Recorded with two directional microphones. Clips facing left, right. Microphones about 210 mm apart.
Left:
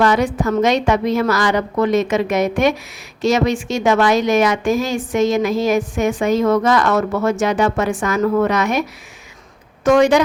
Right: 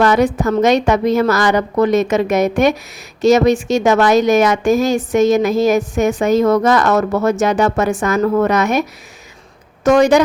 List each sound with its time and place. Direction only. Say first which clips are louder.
0.0 s a woman's voice: right 3 dB; 40° right (ahead or behind)
9.8 s a woman's voice: right 2 dB; 40° right (ahead or behind)